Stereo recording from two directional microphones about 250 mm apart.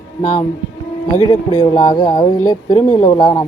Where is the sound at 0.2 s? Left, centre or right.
Left.